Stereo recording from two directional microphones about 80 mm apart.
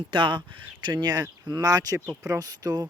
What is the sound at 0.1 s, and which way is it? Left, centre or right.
Speech, right.